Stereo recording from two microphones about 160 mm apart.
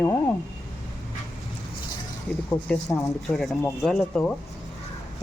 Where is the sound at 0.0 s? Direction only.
20° left (ahead or behind).